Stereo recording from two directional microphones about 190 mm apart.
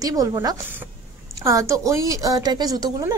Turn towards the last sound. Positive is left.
turn(degrees=-20)  # may be behind; listen again after turning